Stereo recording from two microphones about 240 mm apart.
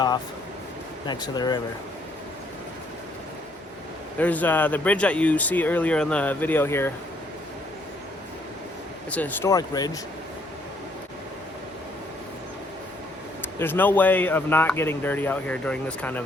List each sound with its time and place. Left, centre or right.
1.0 s speech: centre
4.2 s speech: centre
9.0 s speech: centre
13.6 s speech: centre